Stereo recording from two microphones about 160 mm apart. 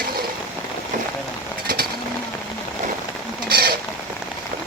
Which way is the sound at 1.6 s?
70° right (ahead or behind).